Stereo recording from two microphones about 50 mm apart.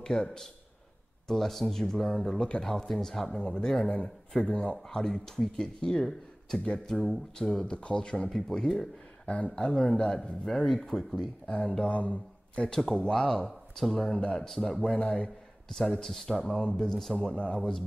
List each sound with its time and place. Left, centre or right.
0.0 s a man's voice: centre
4.5 s speech: left
4.8 s speech: centre
7.5 s speech: left
8.3 s speech: centre
9.2 s speech: left
10.4 s speech: centre
11.4 s speech: centre
12.5 s speech: centre
13.7 s speech: centre
14.0 s speech: centre
14.5 s speech: centre
14.8 s speech: centre